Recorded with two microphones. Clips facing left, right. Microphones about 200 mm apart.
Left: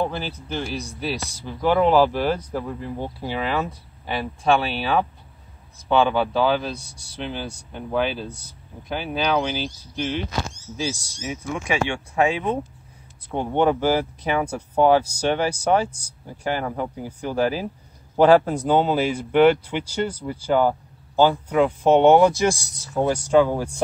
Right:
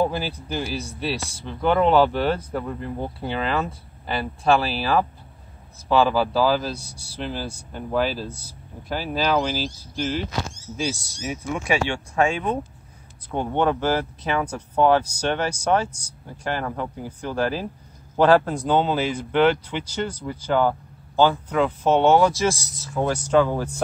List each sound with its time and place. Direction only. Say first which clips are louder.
0.5 s speech: left 2 dB; 5° right (ahead or behind)
6.8 s speech: right 4 dB; 35° right (ahead or behind)
7.2 s speech: even; centre (ahead or behind)
11.9 s speech: left 1 dB; 15° left (ahead or behind)